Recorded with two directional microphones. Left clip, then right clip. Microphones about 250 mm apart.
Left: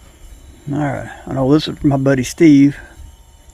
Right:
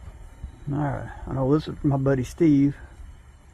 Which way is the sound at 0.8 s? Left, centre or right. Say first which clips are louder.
Left 9 dB; left.